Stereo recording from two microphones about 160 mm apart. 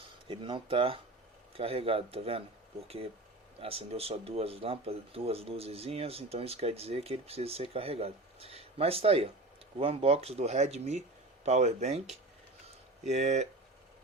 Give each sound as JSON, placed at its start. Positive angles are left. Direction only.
{"t": 0.3, "sound": "speech", "side_deg": -30}